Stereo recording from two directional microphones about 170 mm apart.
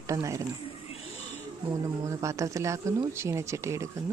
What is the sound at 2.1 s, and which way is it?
Speech, 20° right (ahead or behind).